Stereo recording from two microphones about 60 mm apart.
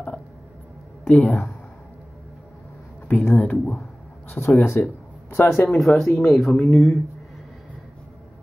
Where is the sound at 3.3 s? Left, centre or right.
Centre.